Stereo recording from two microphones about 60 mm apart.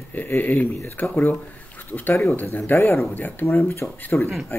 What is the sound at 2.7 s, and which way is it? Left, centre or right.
Speech, left.